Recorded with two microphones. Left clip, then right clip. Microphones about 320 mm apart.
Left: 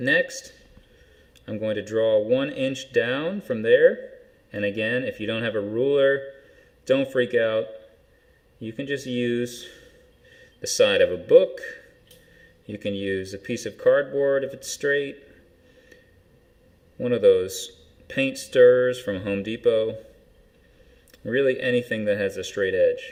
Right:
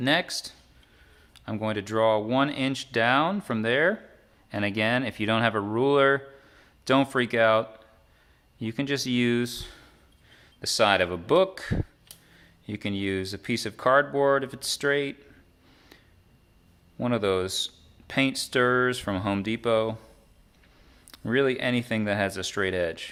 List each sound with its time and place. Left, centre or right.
0.0 s speech: centre
1.5 s speech: centre
8.6 s speech: centre
17.0 s speech: centre
21.2 s speech: centre